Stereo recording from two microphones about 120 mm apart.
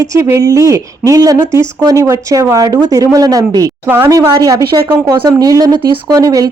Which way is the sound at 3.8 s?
20° right (ahead or behind).